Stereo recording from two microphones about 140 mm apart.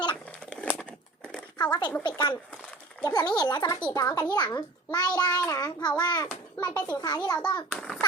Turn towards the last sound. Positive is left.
turn(degrees=5)  # may be behind; listen again after turning